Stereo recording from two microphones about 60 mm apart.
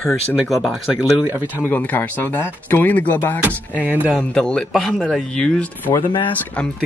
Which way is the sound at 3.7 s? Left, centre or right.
Right.